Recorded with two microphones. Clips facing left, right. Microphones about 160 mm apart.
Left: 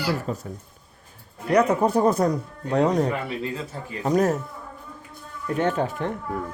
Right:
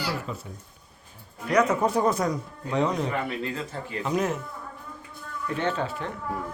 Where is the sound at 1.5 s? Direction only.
30° left (ahead or behind).